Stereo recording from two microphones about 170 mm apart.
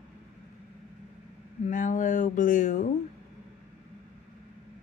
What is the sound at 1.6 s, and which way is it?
A woman's voice, 50° left (ahead or behind).